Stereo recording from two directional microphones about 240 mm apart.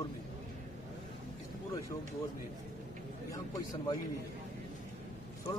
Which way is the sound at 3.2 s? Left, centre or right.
Centre.